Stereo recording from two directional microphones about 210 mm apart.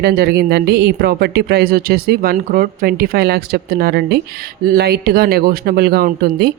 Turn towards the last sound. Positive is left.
turn(degrees=-50)  # may be behind; listen again after turning